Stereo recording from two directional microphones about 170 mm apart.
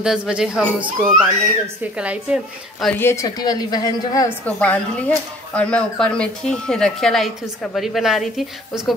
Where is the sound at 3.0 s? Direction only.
15° left (ahead or behind).